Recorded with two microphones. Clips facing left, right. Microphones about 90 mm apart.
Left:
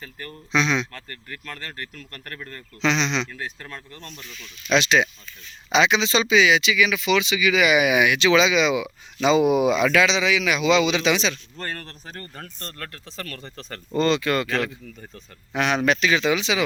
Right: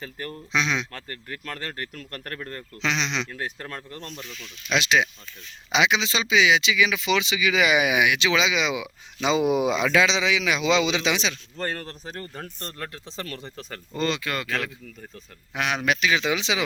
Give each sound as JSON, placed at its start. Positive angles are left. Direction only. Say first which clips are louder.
{"t": 0.5, "sound": "speech", "louder": "left 4 dB", "side_deg": -10}
{"t": 2.0, "sound": "speech", "louder": "right 3 dB", "side_deg": -45}
{"t": 2.8, "sound": "speech", "louder": "left 4 dB", "side_deg": -10}
{"t": 3.7, "sound": "speech", "louder": "right 3 dB", "side_deg": -45}
{"t": 4.0, "sound": "speech", "louder": "right 3 dB", "side_deg": -25}
{"t": 4.7, "sound": "speech", "louder": "left 3 dB", "side_deg": -10}
{"t": 13.6, "sound": "speech", "louder": "left 6 dB", "side_deg": -5}